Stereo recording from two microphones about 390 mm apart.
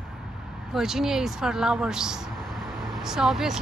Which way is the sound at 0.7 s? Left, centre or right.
Centre.